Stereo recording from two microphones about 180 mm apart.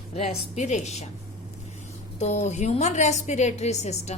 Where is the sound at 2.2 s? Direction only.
40° left (ahead or behind).